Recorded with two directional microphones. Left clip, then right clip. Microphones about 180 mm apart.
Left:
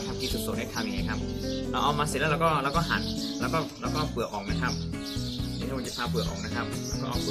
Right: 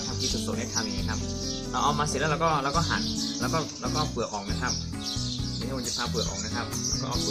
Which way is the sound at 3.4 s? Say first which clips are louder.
Left 2 dB; 15° left (ahead or behind).